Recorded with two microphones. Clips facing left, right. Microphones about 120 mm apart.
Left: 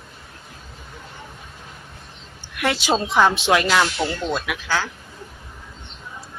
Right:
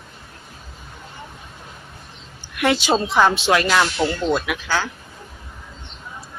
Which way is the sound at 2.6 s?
Centre (ahead or behind).